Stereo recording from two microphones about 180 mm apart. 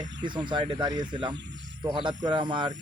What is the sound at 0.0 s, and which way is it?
Speech, 25° right (ahead or behind).